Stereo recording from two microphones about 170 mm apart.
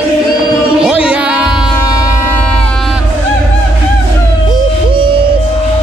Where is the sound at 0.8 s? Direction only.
5° right (ahead or behind).